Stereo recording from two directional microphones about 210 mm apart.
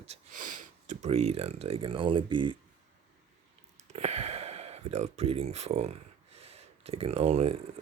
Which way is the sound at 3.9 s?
30° right (ahead or behind).